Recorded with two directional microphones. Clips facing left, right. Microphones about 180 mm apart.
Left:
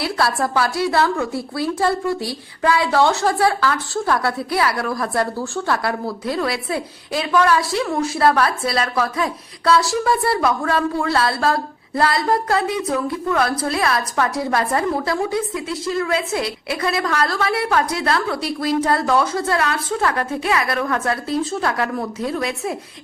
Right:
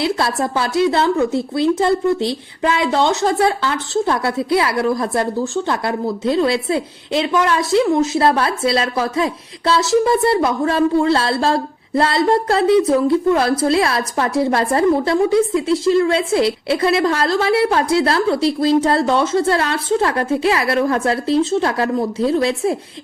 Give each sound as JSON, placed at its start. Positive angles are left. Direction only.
{"t": 0.0, "sound": "a woman's voice", "side_deg": -20}